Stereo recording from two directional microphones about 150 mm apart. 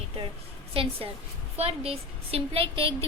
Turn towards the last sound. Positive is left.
turn(degrees=-35)  # may be behind; listen again after turning